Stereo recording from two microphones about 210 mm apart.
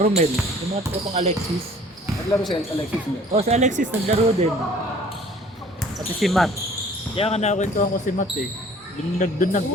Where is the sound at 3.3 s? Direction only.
30° right (ahead or behind).